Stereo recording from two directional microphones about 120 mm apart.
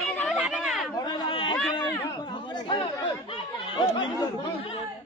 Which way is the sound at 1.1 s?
40° left (ahead or behind).